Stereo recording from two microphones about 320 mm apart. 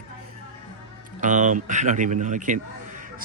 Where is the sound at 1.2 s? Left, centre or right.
Right.